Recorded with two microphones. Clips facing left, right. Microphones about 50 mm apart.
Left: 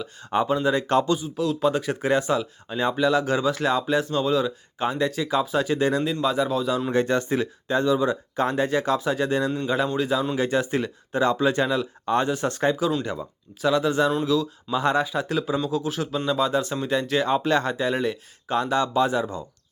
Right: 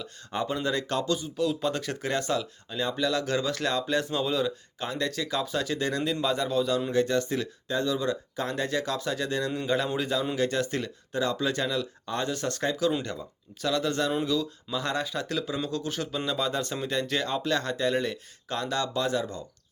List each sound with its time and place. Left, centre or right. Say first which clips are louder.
0.4 s speech: left 4 dB; centre
0.9 s speech: left 8 dB; left
1.2 s speech: left 4 dB; centre
4.0 s speech: left 5 dB; centre
4.8 s speech: left 6 dB; left
6.2 s speech: left 2 dB; centre
6.9 s speech: left 5 dB; left
9.6 s speech: left 4 dB; centre
11.1 s speech: left 6 dB; left
12.3 s speech: left 6 dB; centre
14.3 s speech: left 5 dB; centre
14.7 s speech: left 8 dB; left
17.2 s speech: left 6 dB; left